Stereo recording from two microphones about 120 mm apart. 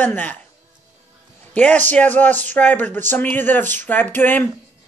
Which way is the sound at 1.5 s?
10° left (ahead or behind).